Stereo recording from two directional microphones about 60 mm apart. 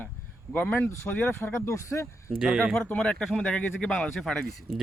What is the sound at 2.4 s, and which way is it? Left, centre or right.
Speech, centre.